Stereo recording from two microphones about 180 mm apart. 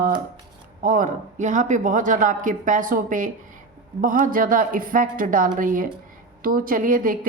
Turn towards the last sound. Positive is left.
turn(degrees=-50)  # may be behind; listen again after turning